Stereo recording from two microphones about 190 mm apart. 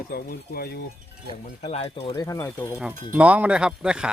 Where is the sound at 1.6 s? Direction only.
30° left (ahead or behind).